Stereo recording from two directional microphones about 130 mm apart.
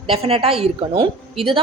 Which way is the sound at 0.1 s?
50° right (ahead or behind).